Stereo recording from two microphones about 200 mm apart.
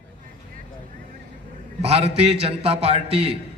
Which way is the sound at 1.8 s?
30° right (ahead or behind).